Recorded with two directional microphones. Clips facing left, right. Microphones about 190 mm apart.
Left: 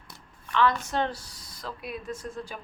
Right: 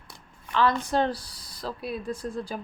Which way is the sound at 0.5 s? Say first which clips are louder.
Right 1 dB; 35° right (ahead or behind).